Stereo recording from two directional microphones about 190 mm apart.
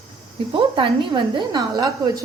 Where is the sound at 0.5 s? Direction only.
25° right (ahead or behind).